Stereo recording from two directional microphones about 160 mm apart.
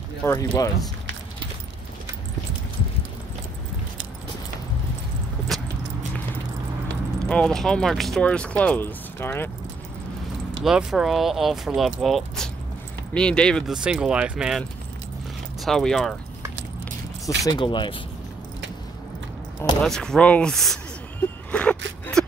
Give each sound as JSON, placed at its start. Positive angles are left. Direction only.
{"t": 0.2, "sound": "speech", "side_deg": 20}
{"t": 5.5, "sound": "a sound", "side_deg": 0}
{"t": 7.2, "sound": "speech", "side_deg": 5}
{"t": 10.6, "sound": "speech", "side_deg": -5}
{"t": 15.6, "sound": "speech", "side_deg": 5}
{"t": 17.5, "sound": "speech", "side_deg": 30}
{"t": 19.8, "sound": "speech", "side_deg": 5}
{"t": 21.2, "sound": "a sound", "side_deg": 5}